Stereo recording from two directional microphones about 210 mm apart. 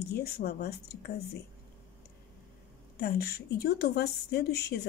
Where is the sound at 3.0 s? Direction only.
45° left (ahead or behind).